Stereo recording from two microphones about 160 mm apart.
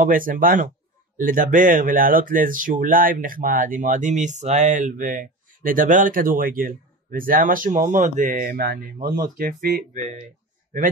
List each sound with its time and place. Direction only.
0.0 s speech: 60° right (ahead or behind)